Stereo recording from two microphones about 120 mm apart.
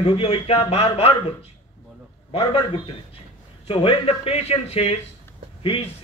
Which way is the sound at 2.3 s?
50° left (ahead or behind).